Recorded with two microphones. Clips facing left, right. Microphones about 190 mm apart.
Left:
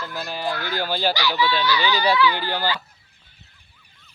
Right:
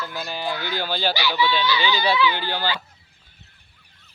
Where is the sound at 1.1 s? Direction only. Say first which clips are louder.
Even; 15° right (ahead or behind).